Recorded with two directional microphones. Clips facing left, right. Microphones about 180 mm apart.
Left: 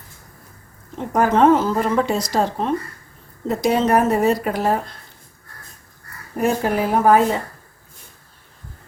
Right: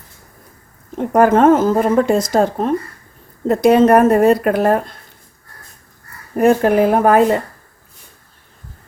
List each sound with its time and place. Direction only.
0.9 s speech: 55° right (ahead or behind)
6.3 s speech: 60° right (ahead or behind)